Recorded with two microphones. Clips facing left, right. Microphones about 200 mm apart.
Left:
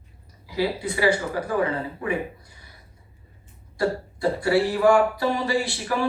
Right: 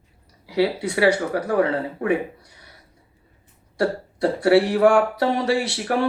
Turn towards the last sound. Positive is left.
turn(degrees=-65)  # may be behind; listen again after turning